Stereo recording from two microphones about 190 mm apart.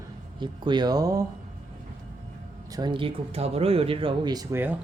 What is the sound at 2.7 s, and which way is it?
Speech, 20° right (ahead or behind).